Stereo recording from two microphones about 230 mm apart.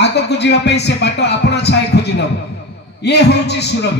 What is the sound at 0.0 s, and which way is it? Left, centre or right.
A man's voice, left.